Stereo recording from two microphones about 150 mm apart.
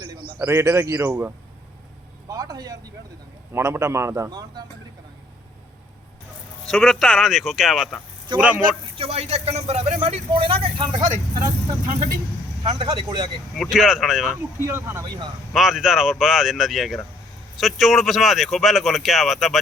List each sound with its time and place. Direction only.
0.4 s speech: 20° right (ahead or behind)
2.3 s vehicle: 25° right (ahead or behind)
3.5 s speech: 15° right (ahead or behind)
6.7 s speech: centre (ahead or behind)
9.0 s speech: 40° right (ahead or behind)
12.6 s speech: 30° right (ahead or behind)
13.6 s speech: 5° right (ahead or behind)
14.6 s speech: 15° right (ahead or behind)
15.5 s speech: centre (ahead or behind)